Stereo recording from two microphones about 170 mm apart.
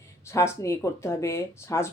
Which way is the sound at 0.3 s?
15° left (ahead or behind).